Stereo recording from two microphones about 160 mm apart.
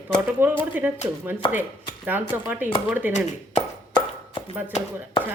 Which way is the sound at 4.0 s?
30° left (ahead or behind).